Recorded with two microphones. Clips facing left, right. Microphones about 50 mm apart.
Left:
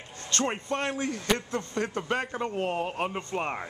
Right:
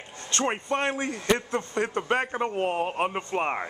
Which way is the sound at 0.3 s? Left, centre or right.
Centre.